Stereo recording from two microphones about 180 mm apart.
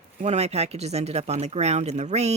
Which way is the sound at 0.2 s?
35° right (ahead or behind).